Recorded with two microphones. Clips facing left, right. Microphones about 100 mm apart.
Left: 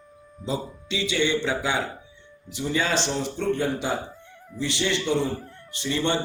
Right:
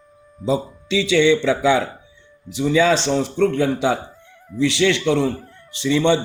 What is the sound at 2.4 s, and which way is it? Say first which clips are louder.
Speech: right 9 dB; 90° right.